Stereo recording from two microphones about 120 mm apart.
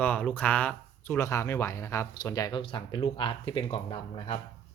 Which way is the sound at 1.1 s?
25° left (ahead or behind).